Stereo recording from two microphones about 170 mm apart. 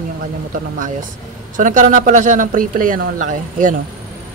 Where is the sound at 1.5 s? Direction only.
50° right (ahead or behind).